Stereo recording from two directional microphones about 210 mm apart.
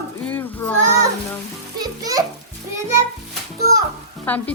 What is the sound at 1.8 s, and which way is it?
Music, 15° right (ahead or behind).